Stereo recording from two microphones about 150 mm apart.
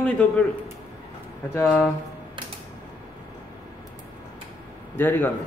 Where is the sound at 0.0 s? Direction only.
10° left (ahead or behind).